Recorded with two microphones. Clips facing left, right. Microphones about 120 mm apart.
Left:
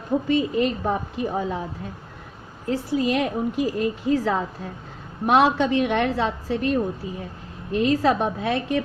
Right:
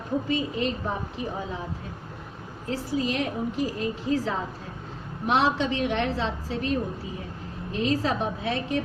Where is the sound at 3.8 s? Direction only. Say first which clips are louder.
Left 4 dB; 55° left (ahead or behind).